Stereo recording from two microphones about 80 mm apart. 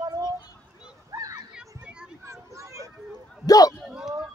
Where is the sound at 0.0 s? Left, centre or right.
Right.